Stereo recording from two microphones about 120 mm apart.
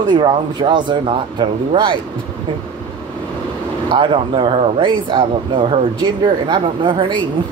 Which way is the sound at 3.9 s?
45° right (ahead or behind).